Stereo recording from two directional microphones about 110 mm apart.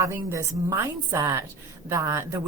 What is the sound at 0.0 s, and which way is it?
A woman's voice, 25° right (ahead or behind).